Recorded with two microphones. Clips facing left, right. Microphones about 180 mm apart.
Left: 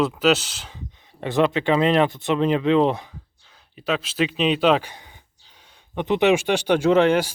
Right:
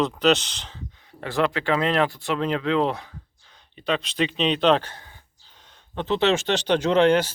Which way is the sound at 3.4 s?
5° left (ahead or behind).